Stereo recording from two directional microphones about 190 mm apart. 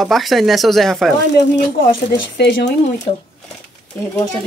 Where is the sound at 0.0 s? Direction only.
Centre (ahead or behind).